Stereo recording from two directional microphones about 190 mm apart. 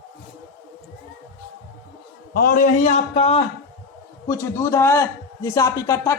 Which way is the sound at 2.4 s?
45° left (ahead or behind).